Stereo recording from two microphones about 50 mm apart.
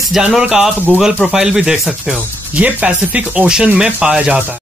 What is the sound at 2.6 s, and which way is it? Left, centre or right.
Speech, right.